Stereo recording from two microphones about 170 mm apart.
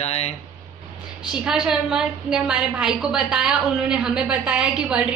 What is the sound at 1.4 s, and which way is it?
A woman's voice, 5° right (ahead or behind).